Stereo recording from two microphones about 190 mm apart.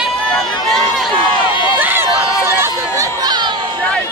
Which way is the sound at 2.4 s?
15° right (ahead or behind).